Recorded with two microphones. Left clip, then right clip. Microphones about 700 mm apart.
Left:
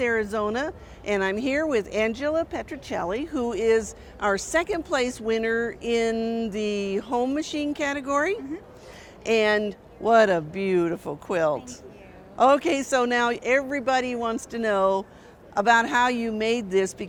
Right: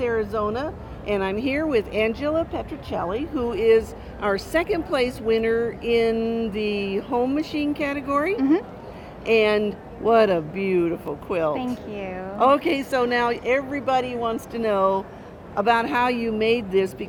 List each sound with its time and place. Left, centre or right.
0.0 s speech: left